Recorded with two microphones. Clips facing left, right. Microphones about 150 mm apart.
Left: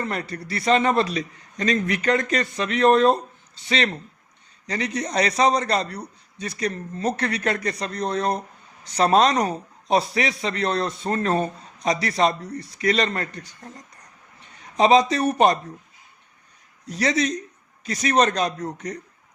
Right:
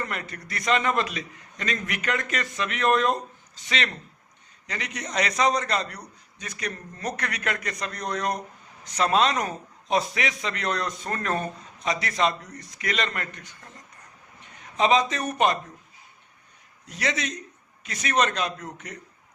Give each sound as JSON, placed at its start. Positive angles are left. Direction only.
{"t": 0.0, "sound": "a man's voice", "side_deg": 35}
{"t": 14.6, "sound": "speech", "side_deg": 35}
{"t": 16.8, "sound": "a man's voice", "side_deg": 35}